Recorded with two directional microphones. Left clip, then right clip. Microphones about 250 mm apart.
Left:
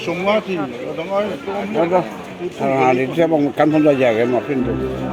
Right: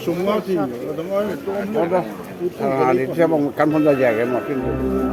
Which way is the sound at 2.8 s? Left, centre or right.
Centre.